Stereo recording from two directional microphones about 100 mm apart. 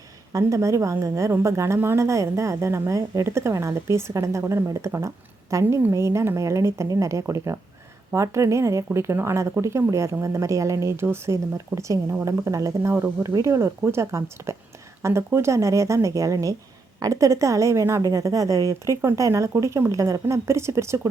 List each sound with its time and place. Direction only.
0.3 s a woman's voice: 30° right (ahead or behind)